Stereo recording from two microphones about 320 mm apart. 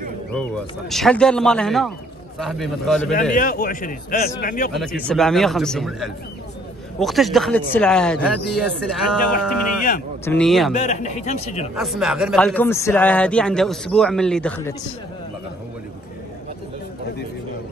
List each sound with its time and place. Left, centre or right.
0.3 s a man's voice: centre
3.3 s a man's voice: left
4.7 s a man's voice: centre
10.7 s a man's voice: left
11.7 s a man's voice: centre